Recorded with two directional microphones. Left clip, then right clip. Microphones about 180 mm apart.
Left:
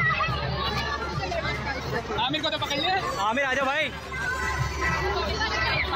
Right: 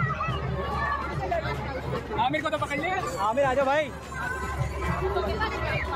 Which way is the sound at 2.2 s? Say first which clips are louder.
Right 2 dB; centre (ahead or behind).